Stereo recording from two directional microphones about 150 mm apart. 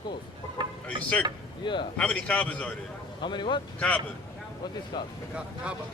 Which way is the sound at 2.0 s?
5° left (ahead or behind).